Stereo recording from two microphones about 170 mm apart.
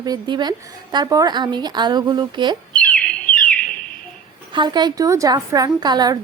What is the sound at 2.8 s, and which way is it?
Bird, 5° left (ahead or behind).